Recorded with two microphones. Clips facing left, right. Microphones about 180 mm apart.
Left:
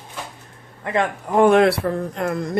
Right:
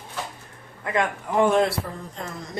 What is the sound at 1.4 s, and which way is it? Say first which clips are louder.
Speech: left 6 dB; 65° left (ahead or behind).